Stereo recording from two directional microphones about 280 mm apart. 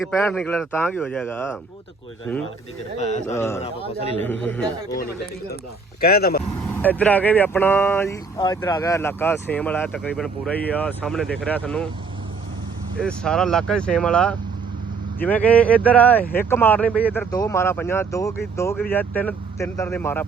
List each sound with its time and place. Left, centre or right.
0.0 s speech: centre
3.0 s speech: left
3.3 s speech: centre
6.0 s speech: left
6.6 s speech: centre
13.0 s speech: centre